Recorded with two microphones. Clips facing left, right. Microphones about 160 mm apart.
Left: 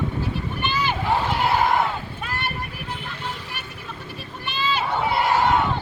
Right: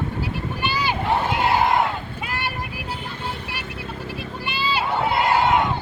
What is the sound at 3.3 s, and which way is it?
Vehicle, 75° right (ahead or behind).